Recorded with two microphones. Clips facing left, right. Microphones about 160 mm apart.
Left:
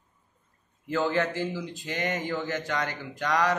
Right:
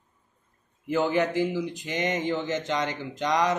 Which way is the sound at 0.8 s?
15° right (ahead or behind).